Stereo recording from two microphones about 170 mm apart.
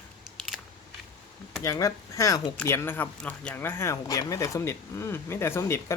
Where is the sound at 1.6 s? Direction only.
20° left (ahead or behind).